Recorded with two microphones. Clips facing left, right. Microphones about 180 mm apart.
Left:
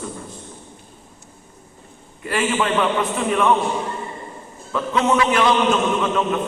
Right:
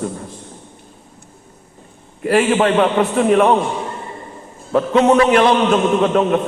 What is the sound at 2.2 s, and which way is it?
A man's voice, 55° right (ahead or behind).